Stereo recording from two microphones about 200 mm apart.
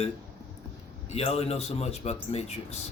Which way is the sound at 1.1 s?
30° left (ahead or behind).